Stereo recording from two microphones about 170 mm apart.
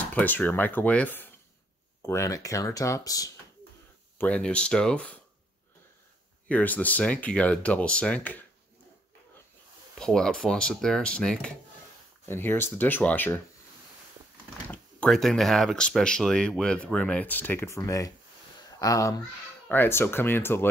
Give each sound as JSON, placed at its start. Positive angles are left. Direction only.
{"t": 0.1, "sound": "speech", "side_deg": 10}
{"t": 4.2, "sound": "speech", "side_deg": 5}
{"t": 6.5, "sound": "speech", "side_deg": 10}
{"t": 9.9, "sound": "speech", "side_deg": 5}
{"t": 14.7, "sound": "speech", "side_deg": 5}